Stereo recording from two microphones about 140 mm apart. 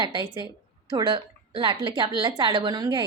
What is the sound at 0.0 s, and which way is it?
A woman's voice, 30° right (ahead or behind).